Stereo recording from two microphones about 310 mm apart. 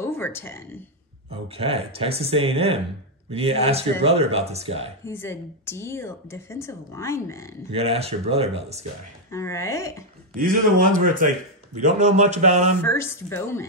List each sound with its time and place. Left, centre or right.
0.0 s speech: centre
1.5 s speech: centre
5.0 s a woman's voice: centre
7.7 s speech: centre
9.3 s a woman's voice: centre
10.3 s speech: right
12.8 s a woman's voice: centre